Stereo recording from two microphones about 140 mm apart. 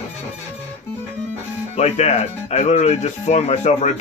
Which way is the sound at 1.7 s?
55° left (ahead or behind).